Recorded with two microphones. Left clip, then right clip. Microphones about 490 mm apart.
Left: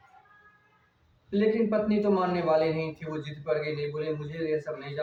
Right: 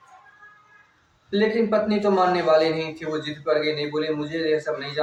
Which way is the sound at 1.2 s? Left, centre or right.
Left.